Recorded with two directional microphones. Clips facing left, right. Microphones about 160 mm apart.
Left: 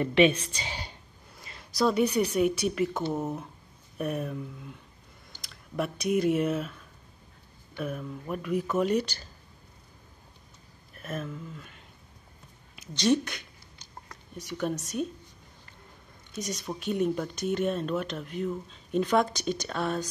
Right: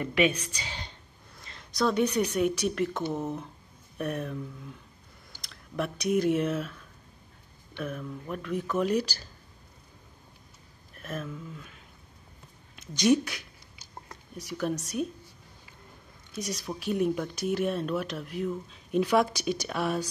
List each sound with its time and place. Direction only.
0.0 s a woman's voice: 25° left (ahead or behind)
0.7 s a sound: 10° left (ahead or behind)
2.3 s speech: centre (ahead or behind)
11.0 s speech: centre (ahead or behind)
12.9 s speech: 15° right (ahead or behind)
13.2 s a sound: 5° right (ahead or behind)
14.3 s speech: centre (ahead or behind)
16.3 s speech: centre (ahead or behind)